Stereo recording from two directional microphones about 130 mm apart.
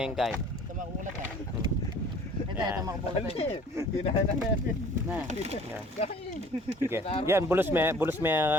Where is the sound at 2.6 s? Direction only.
30° right (ahead or behind).